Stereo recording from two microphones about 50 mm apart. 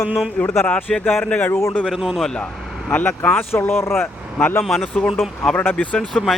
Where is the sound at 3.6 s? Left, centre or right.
Left.